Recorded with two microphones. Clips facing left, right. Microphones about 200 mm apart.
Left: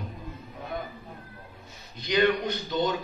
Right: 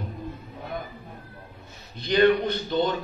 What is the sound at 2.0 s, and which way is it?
Speech, 55° right (ahead or behind).